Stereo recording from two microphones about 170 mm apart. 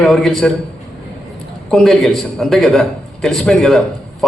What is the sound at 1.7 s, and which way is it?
A man's voice, centre (ahead or behind).